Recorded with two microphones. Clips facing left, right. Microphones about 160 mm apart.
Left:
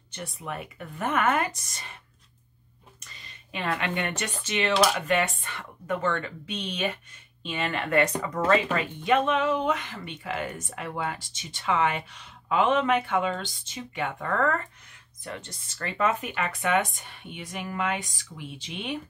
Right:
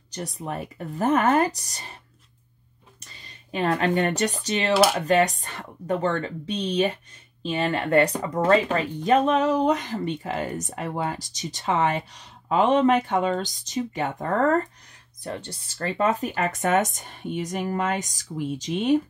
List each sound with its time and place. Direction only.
0.1 s speech: 35° right (ahead or behind)
3.0 s speech: 35° right (ahead or behind)